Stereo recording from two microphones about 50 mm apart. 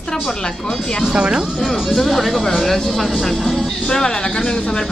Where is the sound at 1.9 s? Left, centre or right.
Centre.